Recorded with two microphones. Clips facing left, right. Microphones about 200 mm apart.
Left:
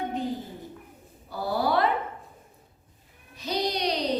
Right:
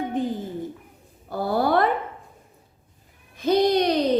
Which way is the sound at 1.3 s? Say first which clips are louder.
Right 5 dB; 50° right (ahead or behind).